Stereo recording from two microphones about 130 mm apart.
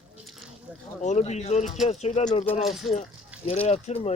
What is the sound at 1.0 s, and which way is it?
Speech, 60° left (ahead or behind).